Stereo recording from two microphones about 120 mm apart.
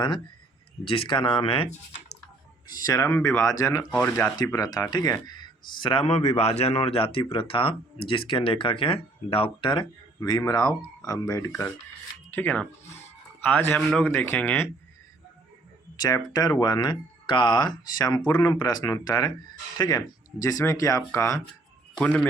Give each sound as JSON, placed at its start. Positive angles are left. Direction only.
{"t": 0.9, "sound": "speech", "side_deg": 45}
{"t": 2.7, "sound": "speech", "side_deg": 30}
{"t": 16.0, "sound": "speech", "side_deg": 30}
{"t": 22.0, "sound": "speech", "side_deg": 10}